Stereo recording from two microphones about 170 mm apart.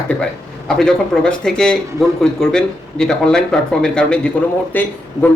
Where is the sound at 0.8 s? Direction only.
5° left (ahead or behind).